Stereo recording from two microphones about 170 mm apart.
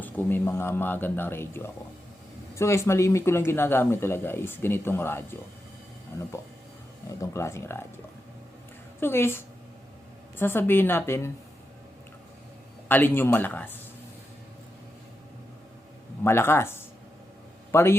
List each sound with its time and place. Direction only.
0.0 s speech: 10° left (ahead or behind)
7.1 s speech: 20° left (ahead or behind)
9.0 s a woman's voice: 15° left (ahead or behind)
12.9 s speech: 10° left (ahead or behind)
16.2 s a man's voice: 15° left (ahead or behind)